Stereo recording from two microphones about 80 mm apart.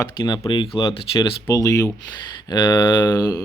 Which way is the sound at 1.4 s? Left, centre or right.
Left.